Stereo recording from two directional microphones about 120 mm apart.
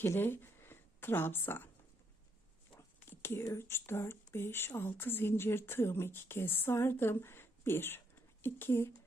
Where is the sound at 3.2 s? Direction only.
20° left (ahead or behind).